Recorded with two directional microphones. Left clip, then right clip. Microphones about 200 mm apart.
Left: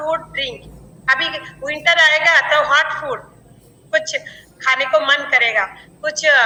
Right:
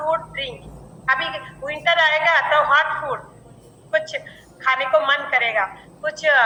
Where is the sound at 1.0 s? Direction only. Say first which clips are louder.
Left 4 dB; 90° left; by 3.2 s 75° left (ahead or behind).